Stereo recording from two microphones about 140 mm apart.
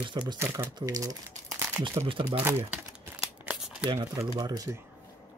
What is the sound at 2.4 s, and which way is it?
Speech, 15° right (ahead or behind).